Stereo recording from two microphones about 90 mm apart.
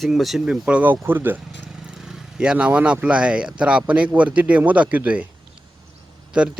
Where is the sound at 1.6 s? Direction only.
5° right (ahead or behind).